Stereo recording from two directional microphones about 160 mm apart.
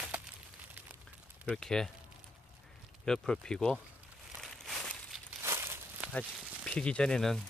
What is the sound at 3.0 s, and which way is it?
Speech, 5° left (ahead or behind).